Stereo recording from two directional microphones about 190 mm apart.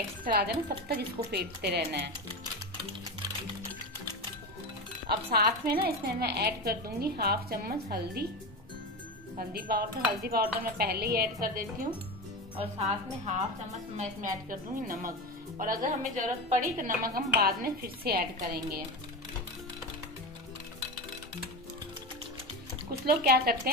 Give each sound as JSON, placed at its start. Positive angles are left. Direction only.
{"t": 0.2, "sound": "a woman's voice", "side_deg": -50}
{"t": 5.0, "sound": "a woman's voice", "side_deg": -55}
{"t": 9.4, "sound": "a woman's voice", "side_deg": -50}
{"t": 12.5, "sound": "a woman's voice", "side_deg": -35}
{"t": 23.0, "sound": "a woman's voice", "side_deg": -55}